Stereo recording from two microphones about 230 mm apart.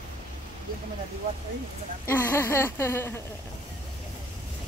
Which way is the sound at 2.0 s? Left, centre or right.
Centre.